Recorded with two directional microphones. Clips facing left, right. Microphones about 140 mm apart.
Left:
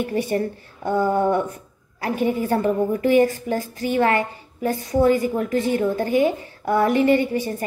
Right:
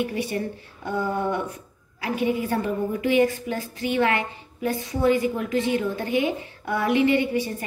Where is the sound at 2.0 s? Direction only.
45° left (ahead or behind).